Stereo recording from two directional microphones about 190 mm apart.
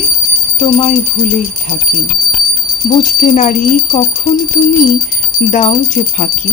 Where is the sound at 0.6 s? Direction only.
35° left (ahead or behind).